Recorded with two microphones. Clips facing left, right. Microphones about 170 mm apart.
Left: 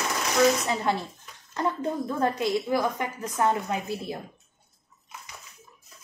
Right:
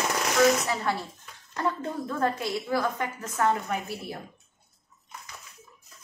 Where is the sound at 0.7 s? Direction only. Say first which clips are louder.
Left 2 dB; 20° left (ahead or behind).